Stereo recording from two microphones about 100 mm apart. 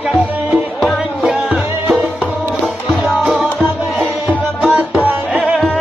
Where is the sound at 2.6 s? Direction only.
Centre (ahead or behind).